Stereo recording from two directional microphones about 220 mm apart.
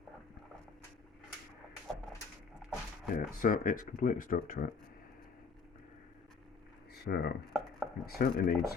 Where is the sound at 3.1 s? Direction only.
40° left (ahead or behind).